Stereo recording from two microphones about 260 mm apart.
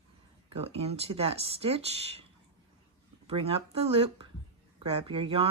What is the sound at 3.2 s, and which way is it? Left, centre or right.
Speech, right.